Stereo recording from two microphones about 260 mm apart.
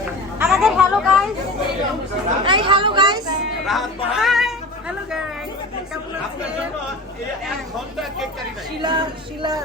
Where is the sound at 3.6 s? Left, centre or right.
Centre.